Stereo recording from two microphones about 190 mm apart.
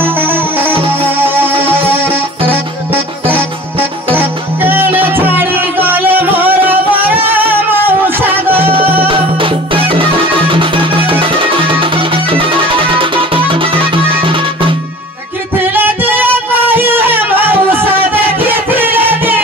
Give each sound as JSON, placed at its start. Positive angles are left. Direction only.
{"t": 0.0, "sound": "music", "side_deg": -10}
{"t": 2.5, "sound": "music", "side_deg": -10}
{"t": 8.2, "sound": "music", "side_deg": -10}
{"t": 9.0, "sound": "music", "side_deg": -25}
{"t": 15.7, "sound": "music", "side_deg": -10}